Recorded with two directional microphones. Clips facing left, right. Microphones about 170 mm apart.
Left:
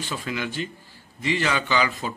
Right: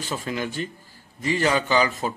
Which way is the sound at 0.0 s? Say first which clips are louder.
Right 2 dB; 40° right (ahead or behind).